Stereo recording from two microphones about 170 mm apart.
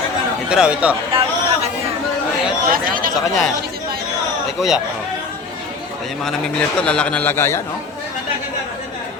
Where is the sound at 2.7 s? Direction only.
55° right (ahead or behind).